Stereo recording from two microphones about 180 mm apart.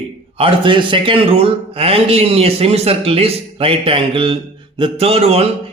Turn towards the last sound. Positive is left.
turn(degrees=-35)  # may be behind; listen again after turning